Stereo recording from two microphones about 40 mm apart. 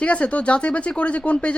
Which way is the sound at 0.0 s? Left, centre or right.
Left.